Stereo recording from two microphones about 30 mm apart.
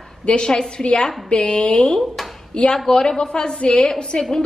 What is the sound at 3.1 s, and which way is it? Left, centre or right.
Speech, left.